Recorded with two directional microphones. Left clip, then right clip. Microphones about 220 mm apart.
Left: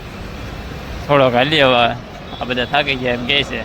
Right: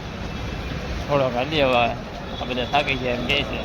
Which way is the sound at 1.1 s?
30° left (ahead or behind).